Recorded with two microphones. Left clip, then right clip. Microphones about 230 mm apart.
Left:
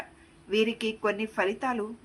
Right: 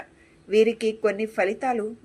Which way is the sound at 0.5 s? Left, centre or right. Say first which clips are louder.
Right 7 dB; centre.